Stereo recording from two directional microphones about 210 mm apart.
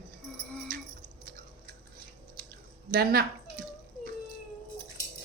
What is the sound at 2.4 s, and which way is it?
Drip, 45° right (ahead or behind).